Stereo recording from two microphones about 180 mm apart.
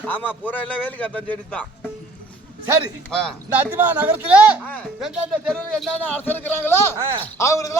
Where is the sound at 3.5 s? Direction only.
10° right (ahead or behind).